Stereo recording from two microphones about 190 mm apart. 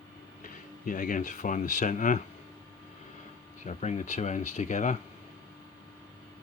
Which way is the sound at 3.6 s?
35° left (ahead or behind).